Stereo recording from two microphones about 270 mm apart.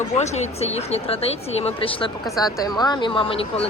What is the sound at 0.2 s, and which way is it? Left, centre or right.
A woman's voice, left.